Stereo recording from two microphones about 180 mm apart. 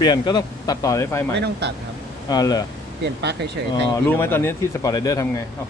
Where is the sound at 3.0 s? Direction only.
70° right (ahead or behind).